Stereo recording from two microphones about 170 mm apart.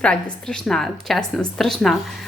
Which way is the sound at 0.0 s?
5° left (ahead or behind).